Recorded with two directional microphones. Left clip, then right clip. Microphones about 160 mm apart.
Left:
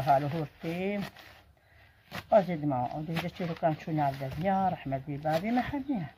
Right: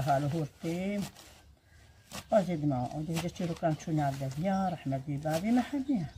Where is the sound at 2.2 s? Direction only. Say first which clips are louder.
Left 3 dB; 15° right (ahead or behind).